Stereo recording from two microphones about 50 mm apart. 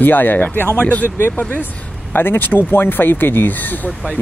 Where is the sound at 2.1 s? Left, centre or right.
Left.